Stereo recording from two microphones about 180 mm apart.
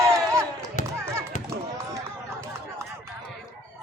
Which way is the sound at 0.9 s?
15° right (ahead or behind).